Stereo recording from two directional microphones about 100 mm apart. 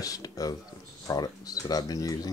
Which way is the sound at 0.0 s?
35° left (ahead or behind).